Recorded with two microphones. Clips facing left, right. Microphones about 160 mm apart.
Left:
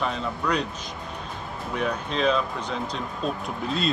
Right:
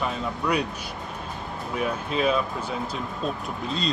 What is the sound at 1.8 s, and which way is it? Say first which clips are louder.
Speech: even; 5° right (ahead or behind).